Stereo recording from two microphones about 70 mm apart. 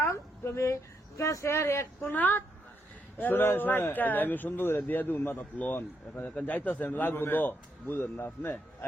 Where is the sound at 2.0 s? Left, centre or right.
Left.